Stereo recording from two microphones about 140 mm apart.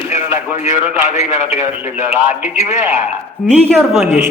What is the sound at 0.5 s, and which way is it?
Speech, 60° left (ahead or behind).